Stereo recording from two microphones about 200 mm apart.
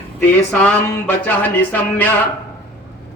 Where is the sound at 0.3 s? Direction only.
10° left (ahead or behind).